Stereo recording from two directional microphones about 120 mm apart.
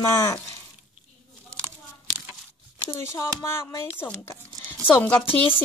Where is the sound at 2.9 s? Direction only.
25° left (ahead or behind).